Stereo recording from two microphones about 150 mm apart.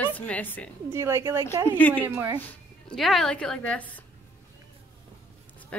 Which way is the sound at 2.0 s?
15° right (ahead or behind).